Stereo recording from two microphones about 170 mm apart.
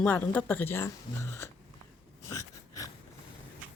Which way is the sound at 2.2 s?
20° left (ahead or behind).